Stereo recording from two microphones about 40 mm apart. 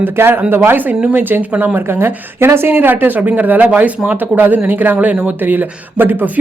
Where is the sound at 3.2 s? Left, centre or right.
Right.